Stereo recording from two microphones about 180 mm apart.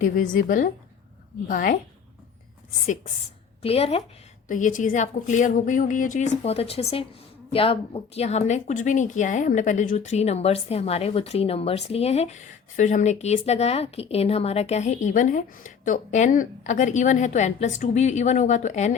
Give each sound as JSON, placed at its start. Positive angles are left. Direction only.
{"t": 0.0, "sound": "a woman's voice", "side_deg": 50}
{"t": 3.6, "sound": "speech", "side_deg": 35}
{"t": 4.4, "sound": "a woman's voice", "side_deg": 45}